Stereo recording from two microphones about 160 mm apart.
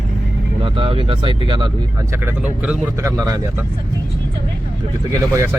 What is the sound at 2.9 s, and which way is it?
Speech, 20° right (ahead or behind).